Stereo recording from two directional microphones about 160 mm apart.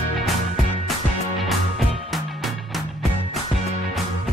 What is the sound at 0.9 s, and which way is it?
Music, centre (ahead or behind).